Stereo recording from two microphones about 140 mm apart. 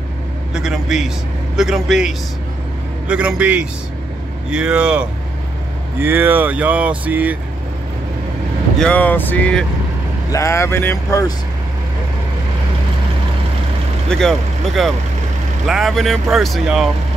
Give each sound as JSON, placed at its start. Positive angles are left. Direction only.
{"t": 0.6, "sound": "speech", "side_deg": -5}
{"t": 8.7, "sound": "speech", "side_deg": 10}
{"t": 10.3, "sound": "speech", "side_deg": 20}
{"t": 14.0, "sound": "speech", "side_deg": 5}